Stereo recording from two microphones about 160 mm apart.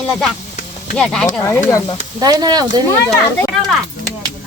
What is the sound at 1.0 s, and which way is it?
Speech, 5° left (ahead or behind).